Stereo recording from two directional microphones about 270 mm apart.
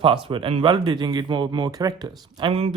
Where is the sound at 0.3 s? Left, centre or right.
Centre.